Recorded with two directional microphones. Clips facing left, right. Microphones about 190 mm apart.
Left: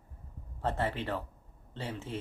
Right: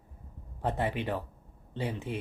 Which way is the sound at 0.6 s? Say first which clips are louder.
Right 2 dB; 15° right (ahead or behind).